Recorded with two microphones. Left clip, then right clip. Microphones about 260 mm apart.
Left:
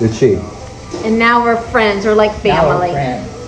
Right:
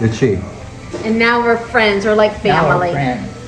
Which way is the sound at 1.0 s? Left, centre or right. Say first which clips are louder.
Left 2 dB; right.